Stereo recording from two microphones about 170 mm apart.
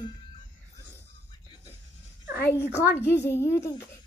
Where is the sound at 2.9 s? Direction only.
15° left (ahead or behind).